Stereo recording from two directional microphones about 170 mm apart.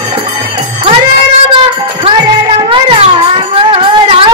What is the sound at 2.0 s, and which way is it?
Music, 30° right (ahead or behind).